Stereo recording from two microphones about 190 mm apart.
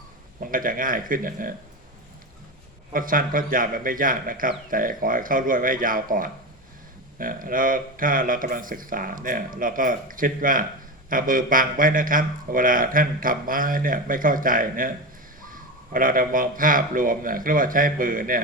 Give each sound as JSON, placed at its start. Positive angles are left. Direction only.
{"t": 0.3, "sound": "a man's voice", "side_deg": -45}
{"t": 2.9, "sound": "a man's voice", "side_deg": -45}